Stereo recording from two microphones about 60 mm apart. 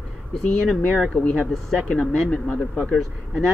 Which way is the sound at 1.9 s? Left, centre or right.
Centre.